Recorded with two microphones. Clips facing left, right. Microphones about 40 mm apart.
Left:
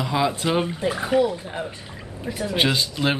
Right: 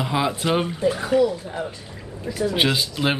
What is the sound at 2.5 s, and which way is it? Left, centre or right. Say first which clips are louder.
Speech: left 1 dB; centre.